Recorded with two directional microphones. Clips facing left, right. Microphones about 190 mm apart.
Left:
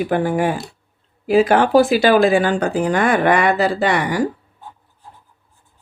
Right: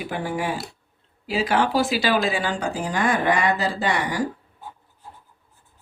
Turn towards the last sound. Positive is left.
turn(degrees=65)  # may be behind; listen again after turning